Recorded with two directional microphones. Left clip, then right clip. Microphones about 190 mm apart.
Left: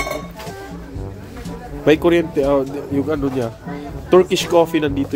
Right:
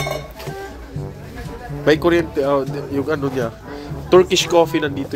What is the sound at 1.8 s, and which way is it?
Speech, 20° left (ahead or behind).